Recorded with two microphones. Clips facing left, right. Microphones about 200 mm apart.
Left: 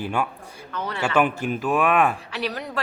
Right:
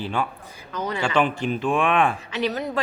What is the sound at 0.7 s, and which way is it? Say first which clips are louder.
Speech: right 3 dB; 10° right (ahead or behind).